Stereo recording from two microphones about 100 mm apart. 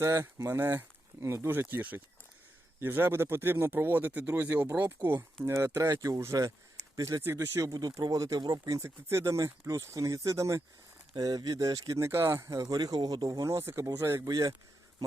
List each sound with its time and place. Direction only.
0.0 s speech: 30° right (ahead or behind)
7.7 s speech: 40° right (ahead or behind)